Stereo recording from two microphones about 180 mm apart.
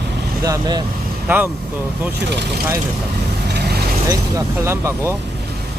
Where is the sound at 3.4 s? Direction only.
65° right (ahead or behind).